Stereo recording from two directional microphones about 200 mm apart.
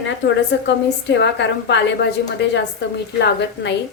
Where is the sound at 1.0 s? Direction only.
60° left (ahead or behind).